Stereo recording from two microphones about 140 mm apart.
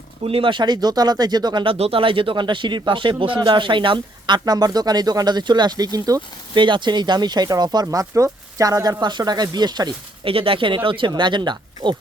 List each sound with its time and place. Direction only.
0.3 s speech: 40° right (ahead or behind)